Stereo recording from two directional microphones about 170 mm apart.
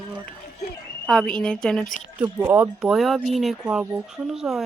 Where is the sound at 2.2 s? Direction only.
20° right (ahead or behind).